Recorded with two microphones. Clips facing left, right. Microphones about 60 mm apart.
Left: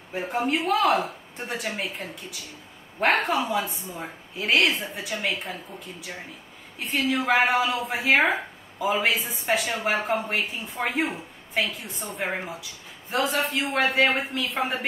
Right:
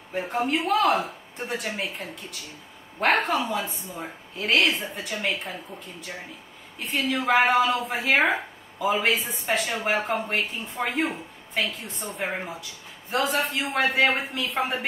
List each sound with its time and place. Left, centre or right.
0.1 s a woman's voice: centre